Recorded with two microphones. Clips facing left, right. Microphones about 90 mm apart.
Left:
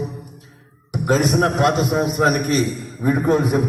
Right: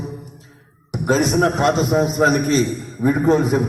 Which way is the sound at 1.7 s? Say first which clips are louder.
Right 2 dB; 30° right (ahead or behind).